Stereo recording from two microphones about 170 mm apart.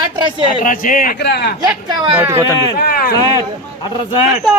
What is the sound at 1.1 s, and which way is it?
Speech, 75° left (ahead or behind).